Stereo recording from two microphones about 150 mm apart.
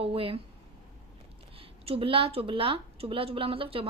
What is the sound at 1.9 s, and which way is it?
A woman's voice, 35° right (ahead or behind).